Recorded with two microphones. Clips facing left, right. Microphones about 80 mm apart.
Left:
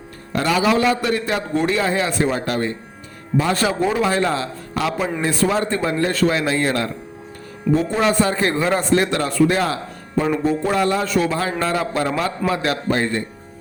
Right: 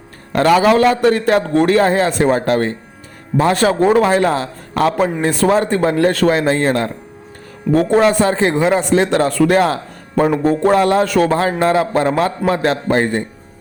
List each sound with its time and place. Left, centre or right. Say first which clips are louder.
0.3 s a man's voice: right 6 dB; right
7.7 s a man's voice: right 6 dB; right
8.0 s a man's voice: right 4 dB; right
9.3 s a man's voice: right 4 dB; right
11.3 s a man's voice: right 6 dB; right
11.7 s a man's voice: right 6 dB; right